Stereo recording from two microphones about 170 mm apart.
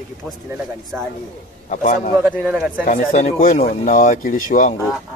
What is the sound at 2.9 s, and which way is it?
Speech, 45° left (ahead or behind).